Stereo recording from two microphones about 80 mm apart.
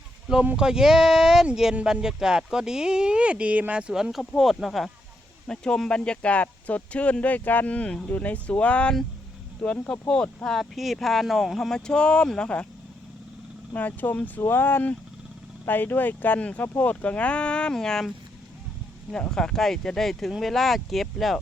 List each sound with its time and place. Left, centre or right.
0.5 s speech: centre
13.7 s speech: left; by 18.1 s centre
19.1 s speech: centre